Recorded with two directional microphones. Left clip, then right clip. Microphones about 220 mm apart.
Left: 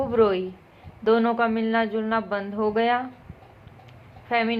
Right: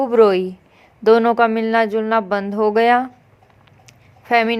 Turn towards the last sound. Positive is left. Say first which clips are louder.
# right 8 dB
turn(degrees=-55)  # may be behind; listen again after turning